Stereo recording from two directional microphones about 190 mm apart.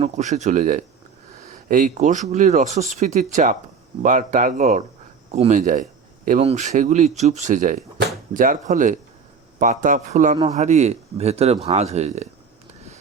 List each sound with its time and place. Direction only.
0.0 s a man's voice: 35° right (ahead or behind)
10.3 s a man's voice: 30° right (ahead or behind)